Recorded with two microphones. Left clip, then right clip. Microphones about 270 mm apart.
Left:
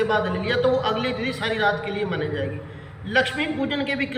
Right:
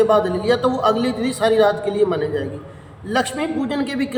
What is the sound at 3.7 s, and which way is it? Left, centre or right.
Speech, centre.